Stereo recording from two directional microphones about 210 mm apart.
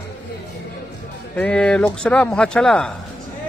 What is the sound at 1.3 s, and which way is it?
Speech, 5° left (ahead or behind).